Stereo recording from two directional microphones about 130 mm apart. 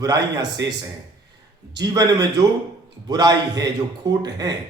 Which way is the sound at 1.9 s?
30° right (ahead or behind).